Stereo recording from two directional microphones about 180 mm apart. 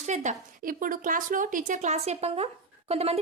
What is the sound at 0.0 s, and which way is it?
Speech, 40° right (ahead or behind).